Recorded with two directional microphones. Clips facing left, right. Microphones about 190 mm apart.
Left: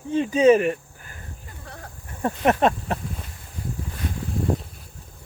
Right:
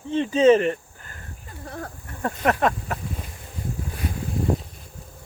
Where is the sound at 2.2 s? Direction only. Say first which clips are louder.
Left 2 dB; 20° left (ahead or behind).